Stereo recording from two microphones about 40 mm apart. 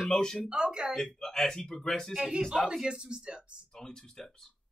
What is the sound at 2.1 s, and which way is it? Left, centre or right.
Speech, centre.